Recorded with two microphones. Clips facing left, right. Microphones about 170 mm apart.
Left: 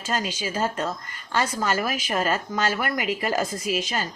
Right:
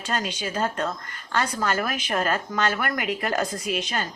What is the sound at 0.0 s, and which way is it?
A woman's voice, 5° left (ahead or behind).